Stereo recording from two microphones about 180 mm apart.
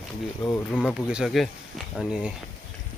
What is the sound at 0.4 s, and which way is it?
A man's voice, centre (ahead or behind).